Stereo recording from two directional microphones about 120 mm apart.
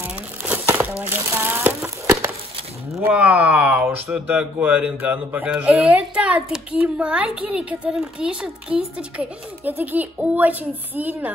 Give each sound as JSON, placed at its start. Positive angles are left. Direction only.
{"t": 0.0, "sound": "crumpling", "side_deg": -15}
{"t": 3.0, "sound": "speech", "side_deg": -10}